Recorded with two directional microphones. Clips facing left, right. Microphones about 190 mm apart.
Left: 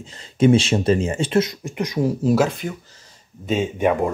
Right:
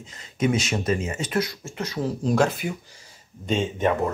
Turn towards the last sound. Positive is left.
turn(degrees=10)  # may be behind; listen again after turning